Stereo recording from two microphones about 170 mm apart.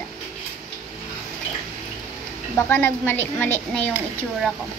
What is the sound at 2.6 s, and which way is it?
A child's voice, 10° left (ahead or behind).